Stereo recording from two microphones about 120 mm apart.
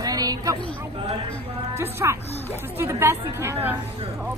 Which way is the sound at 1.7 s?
20° right (ahead or behind).